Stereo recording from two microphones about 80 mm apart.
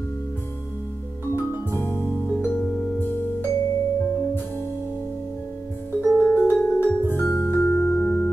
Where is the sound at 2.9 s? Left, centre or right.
Left.